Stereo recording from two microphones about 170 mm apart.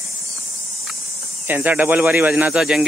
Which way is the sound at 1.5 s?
10° right (ahead or behind).